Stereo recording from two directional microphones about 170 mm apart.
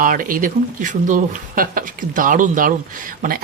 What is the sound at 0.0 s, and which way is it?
Speech, 55° right (ahead or behind).